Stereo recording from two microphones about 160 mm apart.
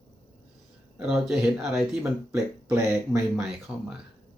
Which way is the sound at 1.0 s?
5° right (ahead or behind).